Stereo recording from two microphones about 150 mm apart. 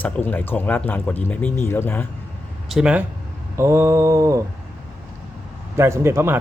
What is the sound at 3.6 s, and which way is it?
Mantra, 20° right (ahead or behind).